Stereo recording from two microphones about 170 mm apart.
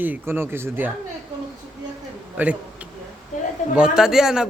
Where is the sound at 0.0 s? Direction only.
10° right (ahead or behind).